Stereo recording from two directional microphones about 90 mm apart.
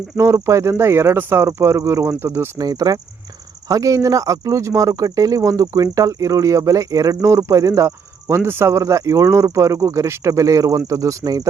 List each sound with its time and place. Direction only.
0.2 s speech: 30° right (ahead or behind)
2.6 s speech: 45° right (ahead or behind)